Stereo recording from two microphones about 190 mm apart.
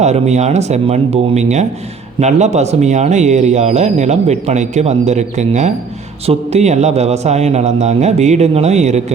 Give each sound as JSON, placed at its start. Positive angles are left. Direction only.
{"t": 0.0, "sound": "speech", "side_deg": -35}